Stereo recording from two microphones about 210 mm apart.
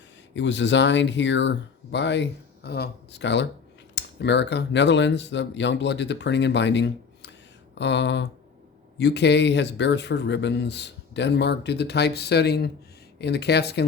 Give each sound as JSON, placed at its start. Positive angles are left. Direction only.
{"t": 0.3, "sound": "speech", "side_deg": 60}